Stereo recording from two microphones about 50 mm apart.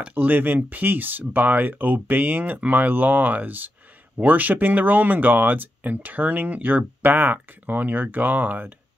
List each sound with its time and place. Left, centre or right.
0.1 s speech: right